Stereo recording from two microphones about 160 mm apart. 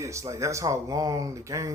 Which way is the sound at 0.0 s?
20° right (ahead or behind).